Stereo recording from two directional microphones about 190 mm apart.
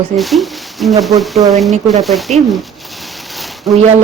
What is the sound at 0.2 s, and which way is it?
Speech, centre (ahead or behind).